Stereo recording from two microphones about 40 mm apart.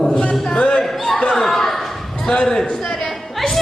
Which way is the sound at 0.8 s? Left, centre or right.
Centre.